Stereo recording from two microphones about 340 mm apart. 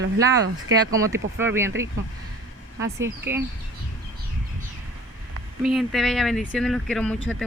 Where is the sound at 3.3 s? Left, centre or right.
Centre.